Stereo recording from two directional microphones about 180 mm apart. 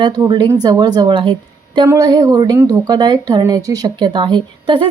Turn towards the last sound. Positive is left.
turn(degrees=-30)  # may be behind; listen again after turning